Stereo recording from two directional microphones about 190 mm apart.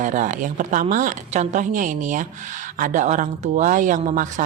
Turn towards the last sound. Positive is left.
turn(degrees=-40)  # may be behind; listen again after turning